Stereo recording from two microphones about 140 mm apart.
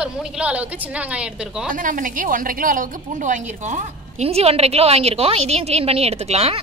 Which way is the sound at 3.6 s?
55° right (ahead or behind).